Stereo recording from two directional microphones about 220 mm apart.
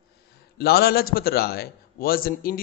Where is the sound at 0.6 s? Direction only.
45° left (ahead or behind).